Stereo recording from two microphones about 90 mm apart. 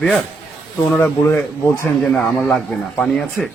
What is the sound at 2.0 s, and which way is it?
Speech, centre (ahead or behind).